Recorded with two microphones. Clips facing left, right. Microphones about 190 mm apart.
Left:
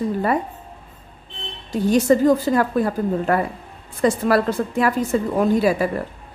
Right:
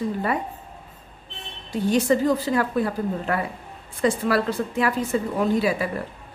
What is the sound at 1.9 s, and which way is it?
A woman's voice, 45° left (ahead or behind).